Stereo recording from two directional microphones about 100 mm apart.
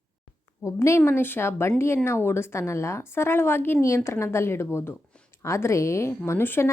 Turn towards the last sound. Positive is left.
turn(degrees=25)  # may be behind; listen again after turning